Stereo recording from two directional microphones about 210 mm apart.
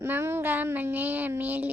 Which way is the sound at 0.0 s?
10° right (ahead or behind).